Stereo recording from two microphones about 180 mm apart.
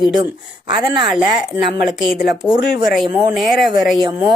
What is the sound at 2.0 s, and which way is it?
A woman's voice, 5° right (ahead or behind).